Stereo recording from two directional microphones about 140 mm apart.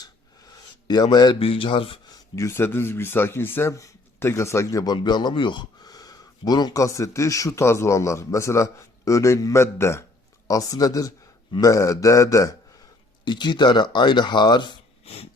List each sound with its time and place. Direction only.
0.9 s speech: 30° left (ahead or behind)
2.1 s speech: 20° left (ahead or behind)
13.2 s speech: 35° left (ahead or behind)
15.0 s a sound: 45° left (ahead or behind)